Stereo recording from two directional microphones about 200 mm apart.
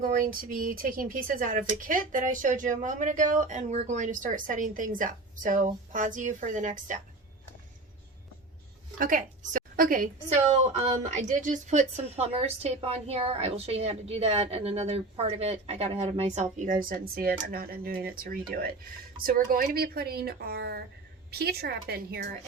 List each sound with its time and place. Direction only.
0.0 s a woman's voice: 45° right (ahead or behind)
9.0 s a woman's voice: 45° right (ahead or behind)
10.4 s a woman's voice: 30° right (ahead or behind); by 22.3 s 50° right (ahead or behind)